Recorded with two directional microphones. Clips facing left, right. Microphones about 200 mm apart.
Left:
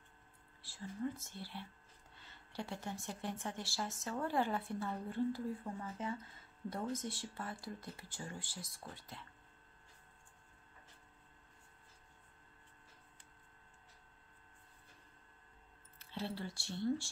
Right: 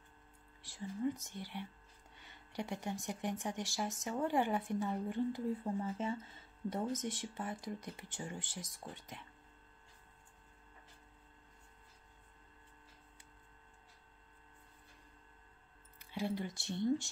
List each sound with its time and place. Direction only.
0.6 s speech: 15° right (ahead or behind)
16.0 s speech: 15° right (ahead or behind)